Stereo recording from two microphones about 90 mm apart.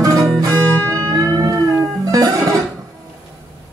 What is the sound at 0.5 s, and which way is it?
Music, 20° left (ahead or behind).